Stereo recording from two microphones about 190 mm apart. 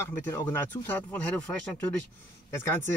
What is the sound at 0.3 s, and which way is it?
Speech, 10° left (ahead or behind).